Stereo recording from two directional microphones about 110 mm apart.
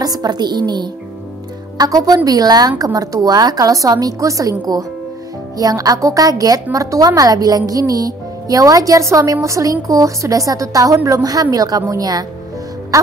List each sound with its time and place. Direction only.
0.0 s a woman's voice: 35° right (ahead or behind)
12.9 s music: 30° right (ahead or behind)